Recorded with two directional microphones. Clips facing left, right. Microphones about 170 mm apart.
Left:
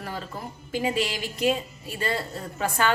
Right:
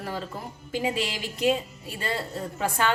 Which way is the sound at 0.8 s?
25° right (ahead or behind).